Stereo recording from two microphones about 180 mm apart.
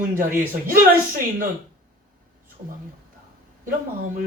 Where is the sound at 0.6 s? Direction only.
50° right (ahead or behind).